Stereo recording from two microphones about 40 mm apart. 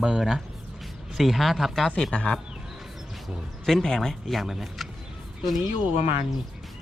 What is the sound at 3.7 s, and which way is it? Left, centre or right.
Speech, centre.